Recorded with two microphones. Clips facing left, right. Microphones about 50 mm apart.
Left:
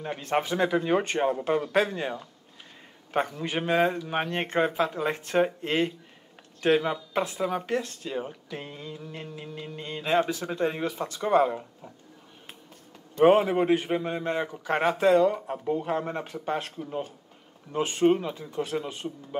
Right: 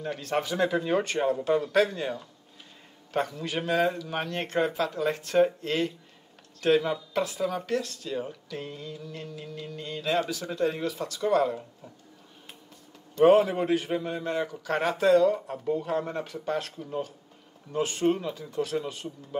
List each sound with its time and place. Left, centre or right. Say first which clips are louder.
0.0 s speech: left 2 dB; left
13.1 s speech: even; left